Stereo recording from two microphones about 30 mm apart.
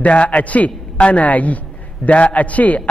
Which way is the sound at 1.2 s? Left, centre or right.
Left.